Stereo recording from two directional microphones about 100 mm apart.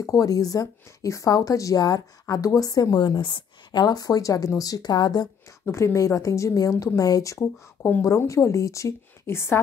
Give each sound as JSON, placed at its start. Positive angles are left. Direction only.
{"t": 0.0, "sound": "speech", "side_deg": 35}
{"t": 5.7, "sound": "speech", "side_deg": 30}